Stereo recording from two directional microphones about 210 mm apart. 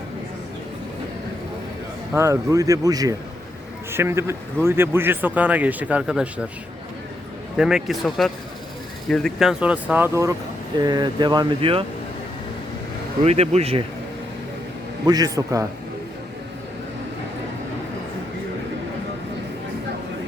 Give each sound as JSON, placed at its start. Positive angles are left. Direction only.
{"t": 2.1, "sound": "a man's voice", "side_deg": -15}
{"t": 7.5, "sound": "speech", "side_deg": -5}
{"t": 13.2, "sound": "speech", "side_deg": -30}
{"t": 15.0, "sound": "a man's voice", "side_deg": -20}